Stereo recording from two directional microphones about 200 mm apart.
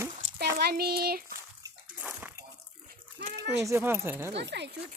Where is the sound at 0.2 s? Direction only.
65° right (ahead or behind).